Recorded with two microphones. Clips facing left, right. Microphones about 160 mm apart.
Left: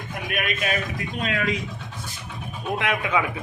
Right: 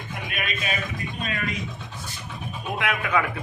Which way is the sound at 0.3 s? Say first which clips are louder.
Left 5 dB; 55° left (ahead or behind).